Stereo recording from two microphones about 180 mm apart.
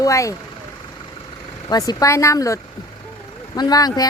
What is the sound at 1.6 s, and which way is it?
Speech, 20° left (ahead or behind).